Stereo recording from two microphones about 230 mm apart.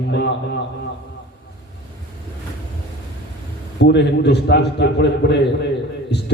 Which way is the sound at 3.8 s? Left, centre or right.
Left.